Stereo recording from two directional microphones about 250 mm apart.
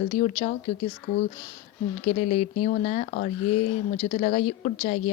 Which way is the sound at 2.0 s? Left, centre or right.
Left.